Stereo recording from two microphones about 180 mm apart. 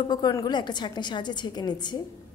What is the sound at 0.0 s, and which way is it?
Speech, 25° left (ahead or behind).